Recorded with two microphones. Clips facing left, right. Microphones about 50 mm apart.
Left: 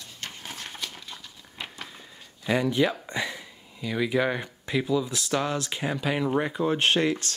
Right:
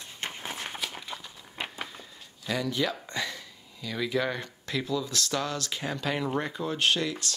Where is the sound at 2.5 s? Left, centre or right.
Left.